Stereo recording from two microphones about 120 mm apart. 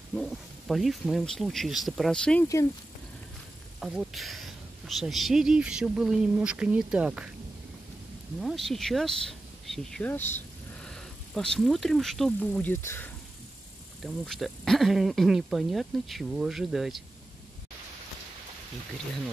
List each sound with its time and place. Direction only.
0.1 s speech: centre (ahead or behind)
3.8 s speech: centre (ahead or behind)
8.4 s speech: centre (ahead or behind)
10.0 s speech: 15° left (ahead or behind)
10.8 s speech: 5° left (ahead or behind)
12.6 s speech: 20° left (ahead or behind)
14.0 s speech: centre (ahead or behind)